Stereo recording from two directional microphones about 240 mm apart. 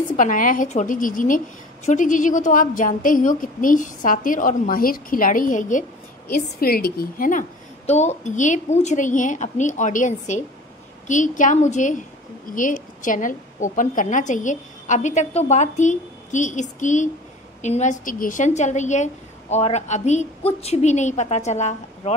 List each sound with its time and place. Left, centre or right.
0.1 s a woman's voice: left